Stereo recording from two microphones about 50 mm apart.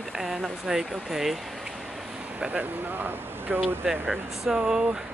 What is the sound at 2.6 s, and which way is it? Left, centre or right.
Speech, right.